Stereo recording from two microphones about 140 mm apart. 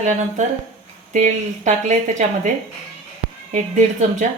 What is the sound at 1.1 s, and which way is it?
Speech, 55° right (ahead or behind).